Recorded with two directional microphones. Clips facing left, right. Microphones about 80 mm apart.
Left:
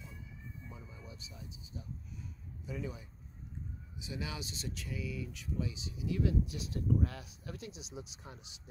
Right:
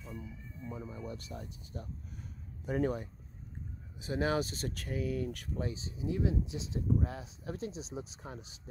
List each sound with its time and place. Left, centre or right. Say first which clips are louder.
0.0 s speech: right 6 dB; centre
0.7 s speech: right 10 dB; right
4.0 s speech: right 11 dB; right